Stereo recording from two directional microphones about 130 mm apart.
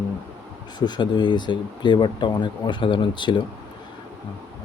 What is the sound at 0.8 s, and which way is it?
Speech, 35° left (ahead or behind).